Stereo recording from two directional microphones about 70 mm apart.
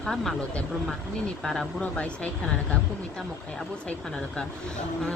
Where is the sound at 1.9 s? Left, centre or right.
Centre.